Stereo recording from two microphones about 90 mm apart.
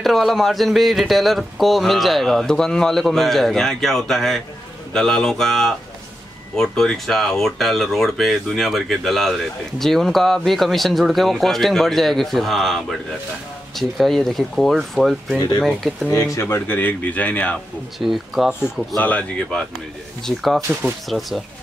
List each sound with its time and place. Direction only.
0.0 s speech: centre (ahead or behind)
16.1 s speech: 35° left (ahead or behind); by 17.6 s 15° left (ahead or behind)
17.9 s speech: 5° right (ahead or behind)
18.9 s speech: 15° left (ahead or behind)